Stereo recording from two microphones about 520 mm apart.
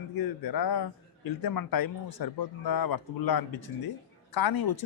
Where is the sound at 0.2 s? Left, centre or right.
Left.